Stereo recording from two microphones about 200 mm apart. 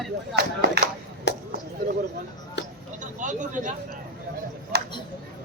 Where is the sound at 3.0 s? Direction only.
40° right (ahead or behind).